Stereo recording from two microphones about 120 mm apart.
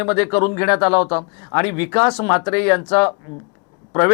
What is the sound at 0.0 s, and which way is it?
Speech, 20° left (ahead or behind).